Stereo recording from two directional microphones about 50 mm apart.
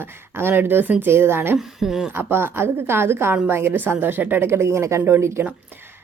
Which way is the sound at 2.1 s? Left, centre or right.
Right.